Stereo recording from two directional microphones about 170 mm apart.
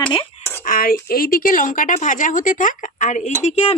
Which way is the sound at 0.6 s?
60° left (ahead or behind).